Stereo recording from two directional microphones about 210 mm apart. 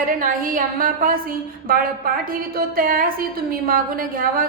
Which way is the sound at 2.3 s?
45° right (ahead or behind).